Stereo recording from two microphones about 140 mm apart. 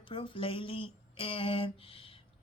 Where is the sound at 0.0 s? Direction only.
40° left (ahead or behind).